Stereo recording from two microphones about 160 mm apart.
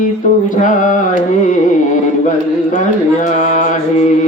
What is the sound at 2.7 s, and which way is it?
Speech, 50° left (ahead or behind).